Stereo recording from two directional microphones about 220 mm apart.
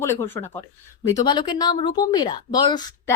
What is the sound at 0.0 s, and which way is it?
A woman's voice, 15° left (ahead or behind).